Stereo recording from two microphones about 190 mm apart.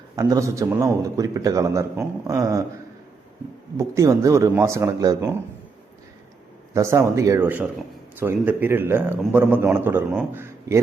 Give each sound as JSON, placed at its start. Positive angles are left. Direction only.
{"t": 0.2, "sound": "a man's voice", "side_deg": -15}
{"t": 3.8, "sound": "a man's voice", "side_deg": -15}
{"t": 6.7, "sound": "a man's voice", "side_deg": -15}